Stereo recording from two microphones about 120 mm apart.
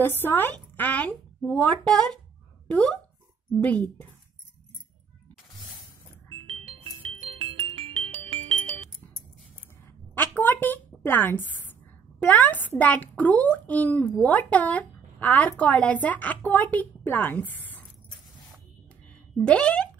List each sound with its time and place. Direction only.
0.0 s a woman's voice: 15° left (ahead or behind)
3.6 s a child's voice: 15° left (ahead or behind)
6.5 s music: 50° right (ahead or behind)
10.1 s a sound: 15° left (ahead or behind)
12.2 s a child's voice: 15° left (ahead or behind)
19.3 s a child's voice: 10° left (ahead or behind)